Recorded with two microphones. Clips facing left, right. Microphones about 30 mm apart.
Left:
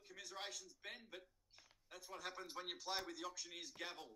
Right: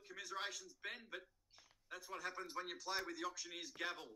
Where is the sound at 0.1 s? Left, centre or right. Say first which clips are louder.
Right 5 dB; centre.